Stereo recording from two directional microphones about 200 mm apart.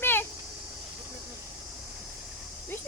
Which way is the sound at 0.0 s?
10° left (ahead or behind).